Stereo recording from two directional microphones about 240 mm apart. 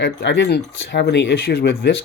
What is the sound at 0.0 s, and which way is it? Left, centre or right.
Speech, left.